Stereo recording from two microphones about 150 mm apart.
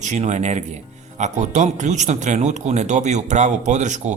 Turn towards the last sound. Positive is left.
turn(degrees=-50)  # may be behind; listen again after turning